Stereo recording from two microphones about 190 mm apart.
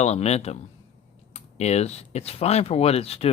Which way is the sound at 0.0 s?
35° left (ahead or behind).